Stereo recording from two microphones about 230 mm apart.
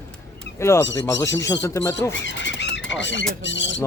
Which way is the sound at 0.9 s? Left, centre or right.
Centre.